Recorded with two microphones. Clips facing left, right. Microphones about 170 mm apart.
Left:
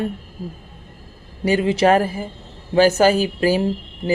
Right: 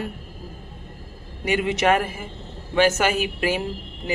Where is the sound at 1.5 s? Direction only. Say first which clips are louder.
Left 5 dB; 35° left (ahead or behind).